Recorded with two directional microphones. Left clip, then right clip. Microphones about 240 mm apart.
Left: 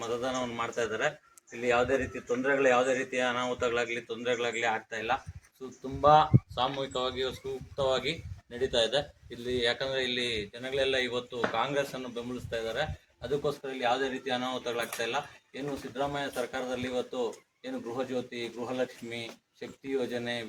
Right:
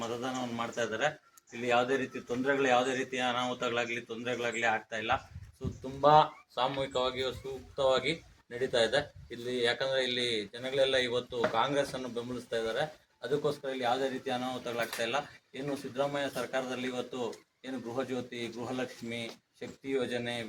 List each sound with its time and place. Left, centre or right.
0.0 s a man's voice: centre